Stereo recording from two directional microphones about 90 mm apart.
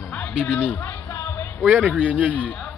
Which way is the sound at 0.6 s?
20° left (ahead or behind).